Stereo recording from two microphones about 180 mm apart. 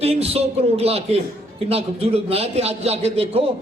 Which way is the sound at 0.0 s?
35° right (ahead or behind).